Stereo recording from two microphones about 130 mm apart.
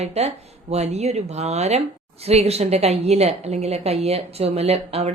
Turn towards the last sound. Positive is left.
turn(degrees=-55)  # may be behind; listen again after turning